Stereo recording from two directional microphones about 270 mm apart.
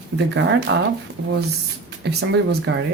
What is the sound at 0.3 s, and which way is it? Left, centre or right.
Speech, right.